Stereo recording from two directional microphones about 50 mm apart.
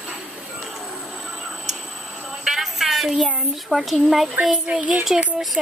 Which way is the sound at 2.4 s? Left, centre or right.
Centre.